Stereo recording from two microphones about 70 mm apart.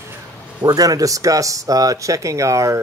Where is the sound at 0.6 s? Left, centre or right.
Right.